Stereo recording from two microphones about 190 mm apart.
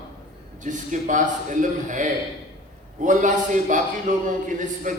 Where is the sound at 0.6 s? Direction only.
40° right (ahead or behind).